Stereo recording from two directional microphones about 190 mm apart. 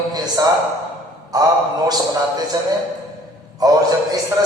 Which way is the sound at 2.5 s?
20° right (ahead or behind).